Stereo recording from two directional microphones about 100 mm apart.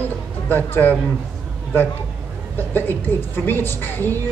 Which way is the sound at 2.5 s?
20° left (ahead or behind).